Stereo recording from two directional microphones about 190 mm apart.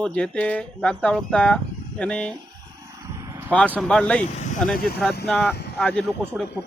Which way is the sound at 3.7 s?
5° left (ahead or behind).